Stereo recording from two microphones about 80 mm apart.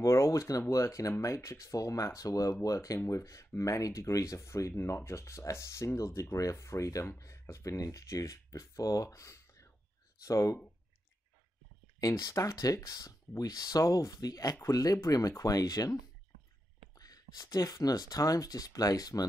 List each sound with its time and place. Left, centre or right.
0.0 s speech: left
12.0 s speech: left
17.0 s speech: left